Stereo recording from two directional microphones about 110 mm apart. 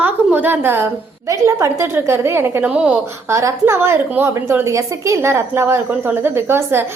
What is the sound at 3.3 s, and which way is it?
A woman's voice, 25° right (ahead or behind).